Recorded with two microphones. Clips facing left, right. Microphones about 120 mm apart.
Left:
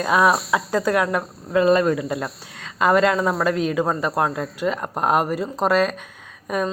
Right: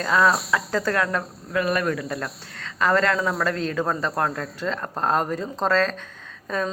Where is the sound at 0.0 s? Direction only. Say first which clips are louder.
Left 2 dB; 25° left (ahead or behind).